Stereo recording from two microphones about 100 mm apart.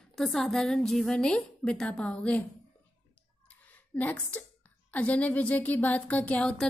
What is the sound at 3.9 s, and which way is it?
A woman's voice, 15° left (ahead or behind).